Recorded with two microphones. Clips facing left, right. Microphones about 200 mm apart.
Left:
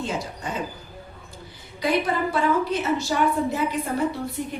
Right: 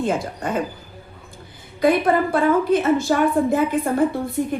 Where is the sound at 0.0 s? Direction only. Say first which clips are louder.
Right 7 dB; 55° right (ahead or behind).